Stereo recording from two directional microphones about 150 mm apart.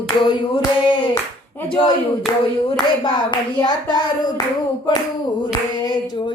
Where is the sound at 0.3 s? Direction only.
35° left (ahead or behind).